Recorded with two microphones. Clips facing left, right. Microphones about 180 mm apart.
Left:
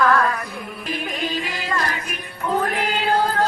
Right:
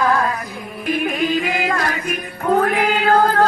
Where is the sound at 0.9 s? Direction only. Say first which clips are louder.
Right 8 dB; 55° right (ahead or behind).